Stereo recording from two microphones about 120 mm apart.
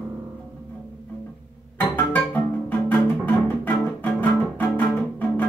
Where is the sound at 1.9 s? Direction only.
15° left (ahead or behind).